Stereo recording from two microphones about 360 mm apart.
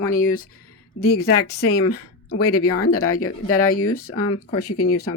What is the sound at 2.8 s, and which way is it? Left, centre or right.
Speech, left.